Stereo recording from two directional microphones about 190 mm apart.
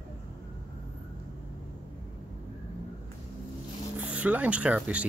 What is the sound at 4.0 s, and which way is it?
Speech, 10° right (ahead or behind).